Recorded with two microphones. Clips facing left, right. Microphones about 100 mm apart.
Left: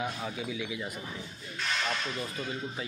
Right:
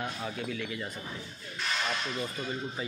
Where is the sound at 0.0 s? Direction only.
5° left (ahead or behind).